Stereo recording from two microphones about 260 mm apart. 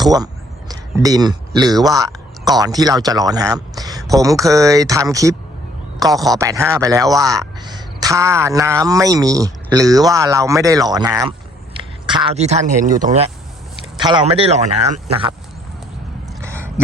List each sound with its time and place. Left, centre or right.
0.7 s a man's voice: centre; by 13.1 s right
14.0 s a man's voice: centre
16.4 s a sound: centre